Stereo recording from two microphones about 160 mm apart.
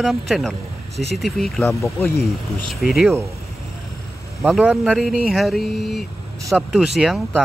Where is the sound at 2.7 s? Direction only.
Centre (ahead or behind).